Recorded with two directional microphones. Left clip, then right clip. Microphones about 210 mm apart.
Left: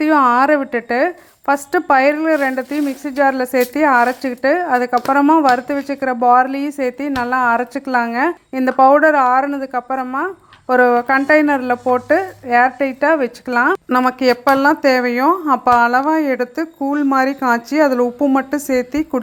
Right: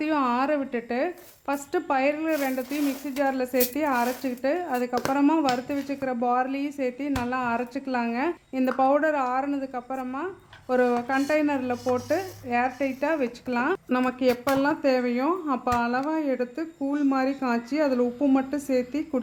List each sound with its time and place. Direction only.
0.0 s a woman's voice: 25° left (ahead or behind)